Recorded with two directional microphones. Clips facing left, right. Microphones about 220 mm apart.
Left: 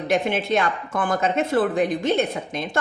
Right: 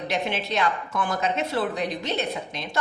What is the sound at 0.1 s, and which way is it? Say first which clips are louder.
A woman's voice: left 7 dB; 50° left (ahead or behind).